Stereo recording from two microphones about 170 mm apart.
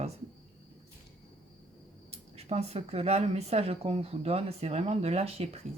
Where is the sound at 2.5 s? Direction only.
40° right (ahead or behind).